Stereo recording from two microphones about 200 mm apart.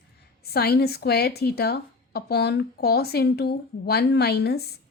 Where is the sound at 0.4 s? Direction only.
50° left (ahead or behind).